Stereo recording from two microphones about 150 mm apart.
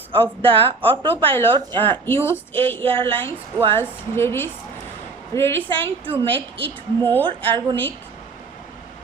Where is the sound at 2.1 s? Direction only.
15° left (ahead or behind).